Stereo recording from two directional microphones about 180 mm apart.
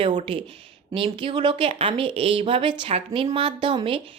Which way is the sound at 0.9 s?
30° right (ahead or behind).